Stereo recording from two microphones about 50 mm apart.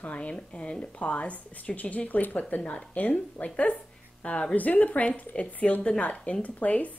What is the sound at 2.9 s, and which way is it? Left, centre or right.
A woman's voice, left.